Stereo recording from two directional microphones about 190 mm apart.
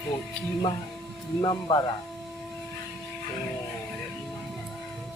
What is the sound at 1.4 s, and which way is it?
Speech, 25° left (ahead or behind).